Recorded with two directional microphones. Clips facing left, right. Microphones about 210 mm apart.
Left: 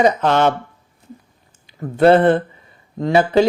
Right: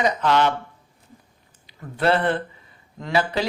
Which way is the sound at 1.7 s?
50° left (ahead or behind).